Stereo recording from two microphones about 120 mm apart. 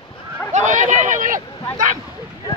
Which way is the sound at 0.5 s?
90° right.